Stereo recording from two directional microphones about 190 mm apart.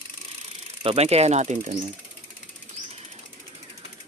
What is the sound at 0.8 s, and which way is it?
Speech, 30° right (ahead or behind).